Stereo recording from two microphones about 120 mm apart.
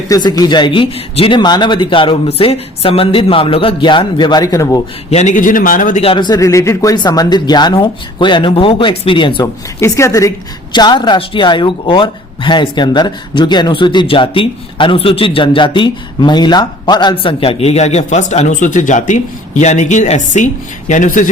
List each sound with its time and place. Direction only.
0.1 s a woman's voice: 30° left (ahead or behind)
5.1 s a man's voice: 80° left
6.0 s a woman's voice: 50° left (ahead or behind)
6.2 s a woman's voice: 30° left (ahead or behind)
9.8 s a woman's voice: 25° left (ahead or behind); by 21.2 s 90° left